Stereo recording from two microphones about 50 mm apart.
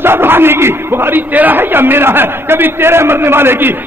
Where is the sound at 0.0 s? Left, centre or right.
Right.